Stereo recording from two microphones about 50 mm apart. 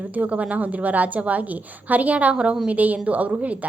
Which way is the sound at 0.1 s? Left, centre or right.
Right.